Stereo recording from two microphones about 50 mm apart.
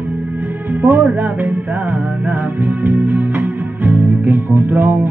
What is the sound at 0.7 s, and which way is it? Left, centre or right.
Music, right.